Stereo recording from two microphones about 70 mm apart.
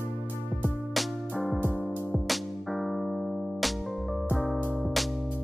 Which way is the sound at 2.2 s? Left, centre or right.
Centre.